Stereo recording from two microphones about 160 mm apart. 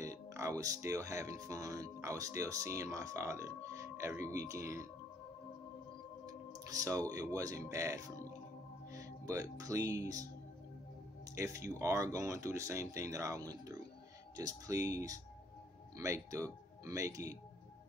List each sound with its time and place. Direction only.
0.0 s speech: 20° right (ahead or behind)
6.6 s speech: 20° right (ahead or behind)
11.3 s speech: 20° right (ahead or behind)